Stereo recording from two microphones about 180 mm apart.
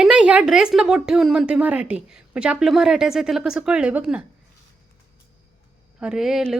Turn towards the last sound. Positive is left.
turn(degrees=0)  # may be behind; listen again after turning